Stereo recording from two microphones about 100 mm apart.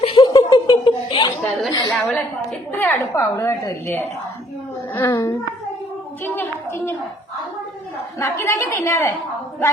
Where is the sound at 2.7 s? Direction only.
20° left (ahead or behind).